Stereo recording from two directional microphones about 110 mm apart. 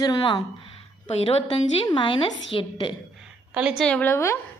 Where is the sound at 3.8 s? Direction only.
10° left (ahead or behind).